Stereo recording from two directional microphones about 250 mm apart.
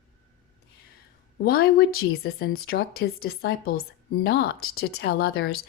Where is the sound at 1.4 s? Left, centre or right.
Left.